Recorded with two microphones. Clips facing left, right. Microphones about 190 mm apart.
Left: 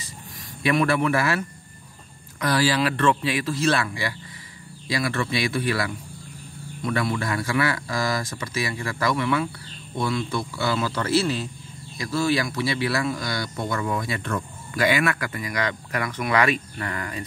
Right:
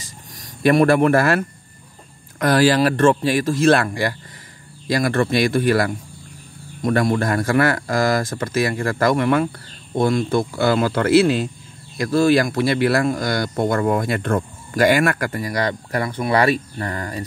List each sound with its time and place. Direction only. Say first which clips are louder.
0.4 s speech: right 7 dB; 45° right (ahead or behind)